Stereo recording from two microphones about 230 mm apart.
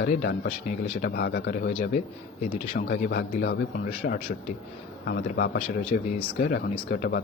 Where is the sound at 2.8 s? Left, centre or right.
Left.